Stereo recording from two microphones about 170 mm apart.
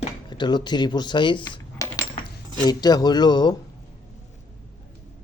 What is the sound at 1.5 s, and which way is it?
Cutlery, 20° left (ahead or behind).